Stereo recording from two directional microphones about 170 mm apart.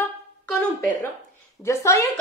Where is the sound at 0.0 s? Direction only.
15° left (ahead or behind).